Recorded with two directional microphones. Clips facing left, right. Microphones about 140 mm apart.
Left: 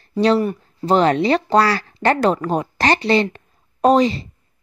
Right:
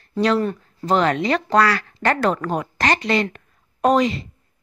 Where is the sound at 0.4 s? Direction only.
10° left (ahead or behind).